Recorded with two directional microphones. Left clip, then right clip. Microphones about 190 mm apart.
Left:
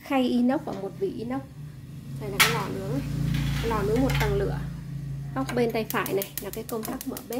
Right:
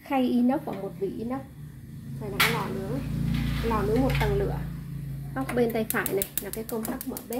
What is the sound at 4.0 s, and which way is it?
Speech, 10° left (ahead or behind).